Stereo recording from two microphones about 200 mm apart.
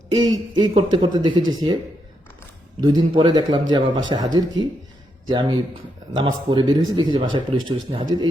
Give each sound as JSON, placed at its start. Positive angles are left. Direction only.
{"t": 0.1, "sound": "speech", "side_deg": -20}
{"t": 2.8, "sound": "speech", "side_deg": -20}